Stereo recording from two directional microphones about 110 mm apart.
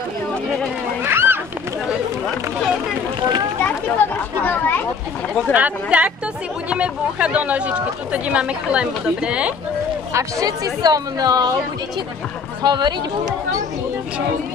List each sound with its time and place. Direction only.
1.0 s a sound: 20° right (ahead or behind)
3.6 s speech: 15° left (ahead or behind)
5.5 s speech: 15° right (ahead or behind)
10.1 s a woman's voice: 35° right (ahead or behind)
12.6 s a woman's voice: 40° right (ahead or behind)